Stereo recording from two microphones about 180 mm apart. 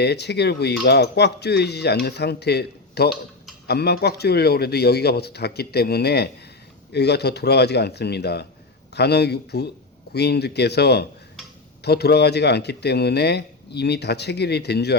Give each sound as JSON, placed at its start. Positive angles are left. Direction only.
{"t": 0.0, "sound": "speech", "side_deg": 65}